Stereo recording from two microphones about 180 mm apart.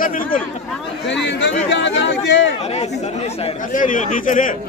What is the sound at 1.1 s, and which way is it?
Speech, 75° left (ahead or behind).